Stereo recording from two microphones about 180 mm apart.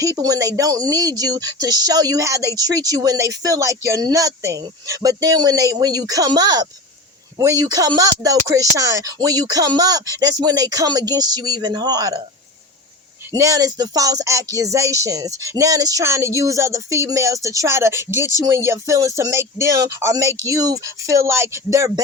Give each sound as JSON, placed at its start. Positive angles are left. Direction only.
{"t": 0.0, "sound": "speech", "side_deg": -20}
{"t": 13.3, "sound": "speech", "side_deg": -20}